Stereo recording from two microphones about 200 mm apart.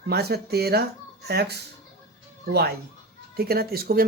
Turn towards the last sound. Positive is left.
turn(degrees=-50)  # may be behind; listen again after turning